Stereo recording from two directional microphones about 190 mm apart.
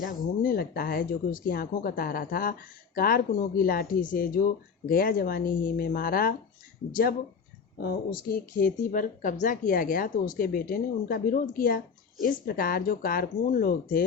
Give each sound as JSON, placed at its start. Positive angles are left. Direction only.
{"t": 0.0, "sound": "speech", "side_deg": 50}